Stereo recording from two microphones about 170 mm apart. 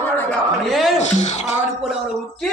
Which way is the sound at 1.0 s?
45° left (ahead or behind).